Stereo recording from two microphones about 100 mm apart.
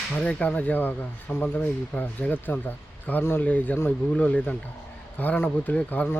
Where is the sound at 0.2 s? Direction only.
10° left (ahead or behind).